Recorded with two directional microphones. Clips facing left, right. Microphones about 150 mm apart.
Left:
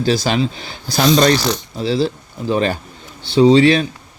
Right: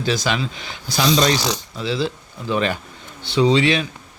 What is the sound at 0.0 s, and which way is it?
Speech, 35° left (ahead or behind).